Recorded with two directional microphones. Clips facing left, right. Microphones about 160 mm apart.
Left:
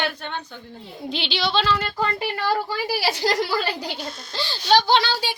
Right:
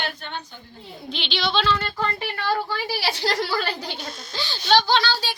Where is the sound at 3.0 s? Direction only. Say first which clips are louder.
Left 3 dB; 45° left (ahead or behind).